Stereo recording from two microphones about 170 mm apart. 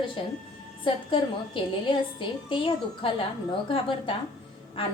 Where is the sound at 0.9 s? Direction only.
30° left (ahead or behind).